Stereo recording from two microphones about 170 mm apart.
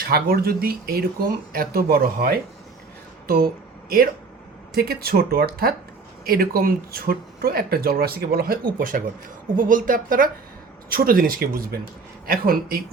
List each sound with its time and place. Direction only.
0.1 s speech: 65° right (ahead or behind)